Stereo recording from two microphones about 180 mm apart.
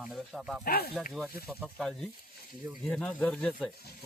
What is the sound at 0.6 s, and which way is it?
Speech, 55° left (ahead or behind).